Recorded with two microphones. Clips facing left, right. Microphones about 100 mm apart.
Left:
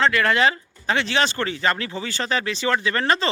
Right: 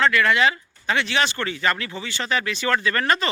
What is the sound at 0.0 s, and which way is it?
Speech, 30° left (ahead or behind).